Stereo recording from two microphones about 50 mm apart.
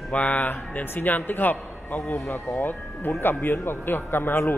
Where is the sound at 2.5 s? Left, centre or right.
Left.